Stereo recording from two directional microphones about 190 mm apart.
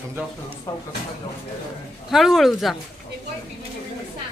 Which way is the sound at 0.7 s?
15° left (ahead or behind).